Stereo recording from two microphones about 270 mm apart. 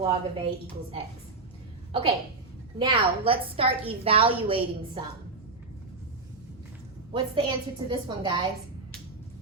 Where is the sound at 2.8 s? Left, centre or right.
Centre.